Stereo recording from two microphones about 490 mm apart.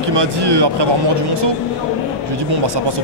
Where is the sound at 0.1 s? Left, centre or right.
Right.